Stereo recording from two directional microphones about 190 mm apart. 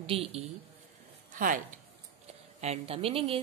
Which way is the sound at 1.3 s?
45° right (ahead or behind).